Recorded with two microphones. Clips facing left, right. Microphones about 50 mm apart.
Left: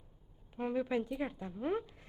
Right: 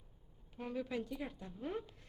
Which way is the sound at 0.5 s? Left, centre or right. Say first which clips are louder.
Left 7 dB; left.